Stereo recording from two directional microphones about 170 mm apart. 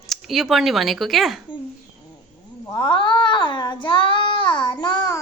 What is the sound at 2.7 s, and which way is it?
Speech, 30° left (ahead or behind).